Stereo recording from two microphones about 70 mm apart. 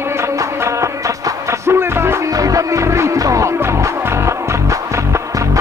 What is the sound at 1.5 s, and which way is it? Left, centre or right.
Music, right.